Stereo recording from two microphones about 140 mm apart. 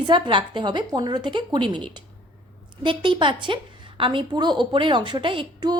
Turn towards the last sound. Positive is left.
turn(degrees=-35)  # may be behind; listen again after turning